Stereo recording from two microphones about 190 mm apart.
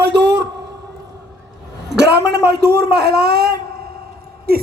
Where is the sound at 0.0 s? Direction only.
65° right (ahead or behind).